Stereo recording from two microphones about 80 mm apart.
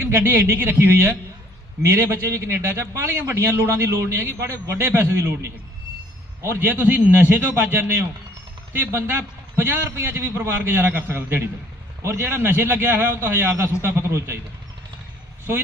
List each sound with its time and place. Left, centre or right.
0.0 s a man's voice: right